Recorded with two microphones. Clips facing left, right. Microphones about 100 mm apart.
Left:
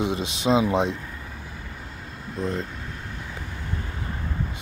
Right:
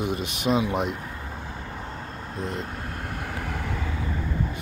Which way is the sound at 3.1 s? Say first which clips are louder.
Right 5 dB; 65° right (ahead or behind).